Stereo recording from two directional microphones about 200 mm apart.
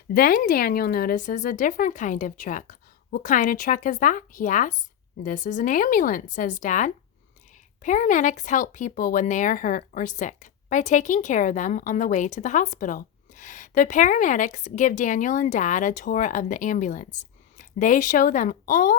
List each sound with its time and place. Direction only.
0.1 s speech: 45° left (ahead or behind)